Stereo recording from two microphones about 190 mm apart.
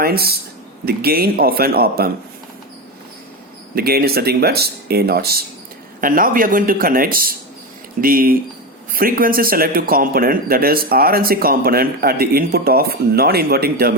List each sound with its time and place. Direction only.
0.0 s a man's voice: 55° right (ahead or behind)
3.8 s a man's voice: 55° right (ahead or behind)